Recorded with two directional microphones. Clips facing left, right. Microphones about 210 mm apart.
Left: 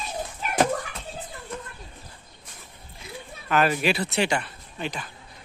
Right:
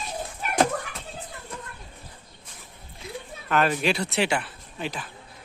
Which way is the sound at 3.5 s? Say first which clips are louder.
Left 1 dB; 5° left (ahead or behind).